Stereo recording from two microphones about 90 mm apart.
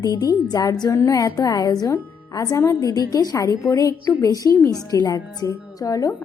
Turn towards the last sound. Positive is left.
turn(degrees=40)  # may be behind; listen again after turning